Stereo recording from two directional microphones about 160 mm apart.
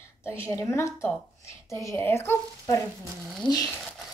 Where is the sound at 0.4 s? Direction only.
15° left (ahead or behind).